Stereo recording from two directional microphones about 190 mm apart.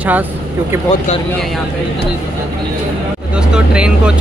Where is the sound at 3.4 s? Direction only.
5° right (ahead or behind).